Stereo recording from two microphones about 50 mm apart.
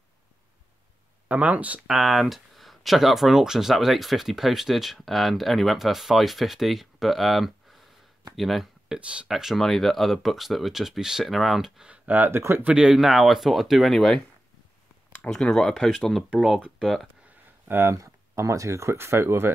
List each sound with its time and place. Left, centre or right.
1.3 s speech: right
1.9 s speech: centre
9.0 s speech: right
9.3 s speech: centre
9.6 s speech: centre
12.3 s speech: right
12.6 s speech: centre
12.9 s speech: centre
17.7 s speech: right
18.9 s speech: right